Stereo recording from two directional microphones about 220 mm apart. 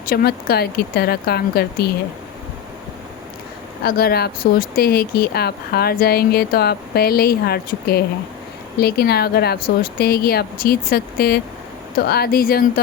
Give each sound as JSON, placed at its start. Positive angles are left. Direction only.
{"t": 0.1, "sound": "speech", "side_deg": 45}
{"t": 3.8, "sound": "speech", "side_deg": 45}